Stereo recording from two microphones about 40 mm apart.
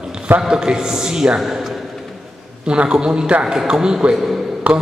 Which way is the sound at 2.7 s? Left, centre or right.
Right.